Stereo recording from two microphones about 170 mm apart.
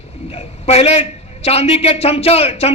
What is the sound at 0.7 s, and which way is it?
A man's voice, 40° left (ahead or behind).